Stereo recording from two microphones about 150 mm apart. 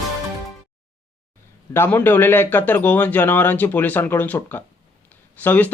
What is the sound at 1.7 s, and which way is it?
Speech, 15° left (ahead or behind).